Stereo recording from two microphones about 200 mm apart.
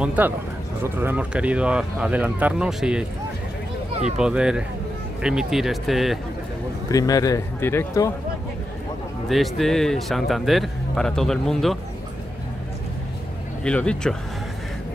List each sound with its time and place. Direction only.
0.0 s speech: 5° right (ahead or behind)
6.9 s speech: 15° left (ahead or behind)
9.3 s speech: centre (ahead or behind)
13.7 s speech: 5° left (ahead or behind)